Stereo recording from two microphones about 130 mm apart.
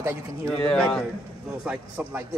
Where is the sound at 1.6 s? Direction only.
10° right (ahead or behind).